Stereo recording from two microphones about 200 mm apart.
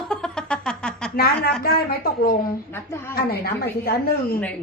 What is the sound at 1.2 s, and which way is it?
A woman's voice, 50° left (ahead or behind).